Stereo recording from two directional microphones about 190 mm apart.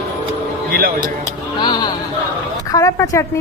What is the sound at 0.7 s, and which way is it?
Music, 50° right (ahead or behind).